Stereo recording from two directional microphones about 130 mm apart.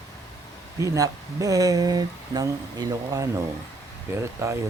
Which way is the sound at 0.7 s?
25° right (ahead or behind).